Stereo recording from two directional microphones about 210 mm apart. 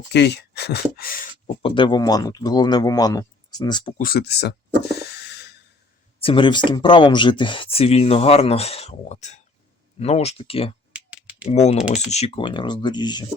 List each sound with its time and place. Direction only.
0.1 s speech: 55° left (ahead or behind)
1.6 s speech: 25° left (ahead or behind)
3.9 s speech: 45° left (ahead or behind)
4.9 s a sound: 50° left (ahead or behind)
6.1 s speech: 25° left (ahead or behind)
10.9 s a sound: 5° right (ahead or behind)
11.4 s speech: 30° left (ahead or behind)